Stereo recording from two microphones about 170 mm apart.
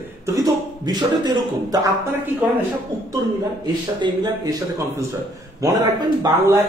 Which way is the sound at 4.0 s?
25° right (ahead or behind).